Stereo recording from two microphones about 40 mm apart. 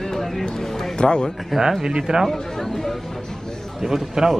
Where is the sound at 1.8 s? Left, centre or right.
Centre.